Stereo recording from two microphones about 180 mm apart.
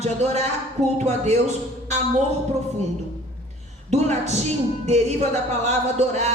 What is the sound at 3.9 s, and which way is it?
A woman's voice, 40° right (ahead or behind).